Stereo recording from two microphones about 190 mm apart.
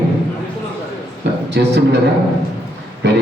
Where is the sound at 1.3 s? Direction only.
65° right (ahead or behind).